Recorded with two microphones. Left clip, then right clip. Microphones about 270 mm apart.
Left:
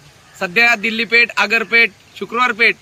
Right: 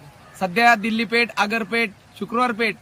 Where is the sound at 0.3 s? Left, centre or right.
Centre.